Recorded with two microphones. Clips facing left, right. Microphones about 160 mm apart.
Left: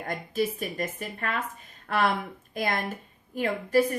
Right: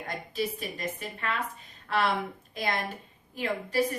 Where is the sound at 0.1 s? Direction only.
50° left (ahead or behind).